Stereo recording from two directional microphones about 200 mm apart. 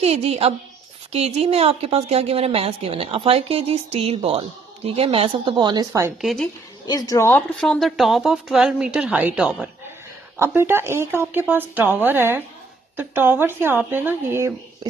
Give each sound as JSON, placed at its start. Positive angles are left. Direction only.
{"t": 0.0, "sound": "a woman's voice", "side_deg": -30}
{"t": 6.2, "sound": "a woman's voice", "side_deg": 5}
{"t": 6.8, "sound": "a woman's voice", "side_deg": 20}